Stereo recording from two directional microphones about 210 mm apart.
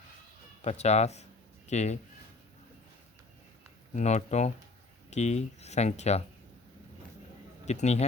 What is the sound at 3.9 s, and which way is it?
Speech, 35° left (ahead or behind).